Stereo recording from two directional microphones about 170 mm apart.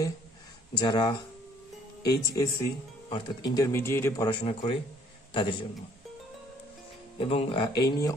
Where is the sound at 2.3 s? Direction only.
20° left (ahead or behind).